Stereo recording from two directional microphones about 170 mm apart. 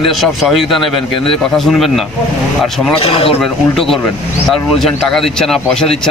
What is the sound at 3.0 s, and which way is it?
Speech, 35° left (ahead or behind).